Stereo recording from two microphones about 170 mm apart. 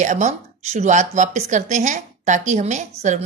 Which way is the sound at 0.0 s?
45° right (ahead or behind).